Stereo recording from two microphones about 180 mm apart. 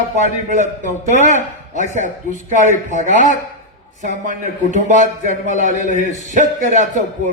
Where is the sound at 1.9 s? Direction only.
45° right (ahead or behind).